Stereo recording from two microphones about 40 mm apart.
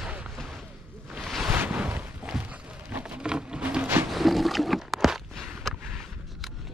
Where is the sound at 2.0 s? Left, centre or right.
Right.